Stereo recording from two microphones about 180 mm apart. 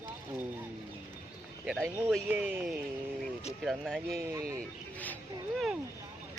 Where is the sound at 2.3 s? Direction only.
10° right (ahead or behind).